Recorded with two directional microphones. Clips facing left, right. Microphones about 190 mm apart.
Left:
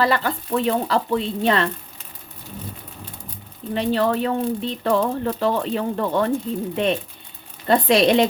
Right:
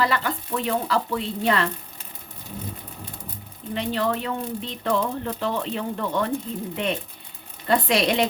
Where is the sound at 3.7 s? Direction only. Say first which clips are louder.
Left 5 dB; 35° left (ahead or behind).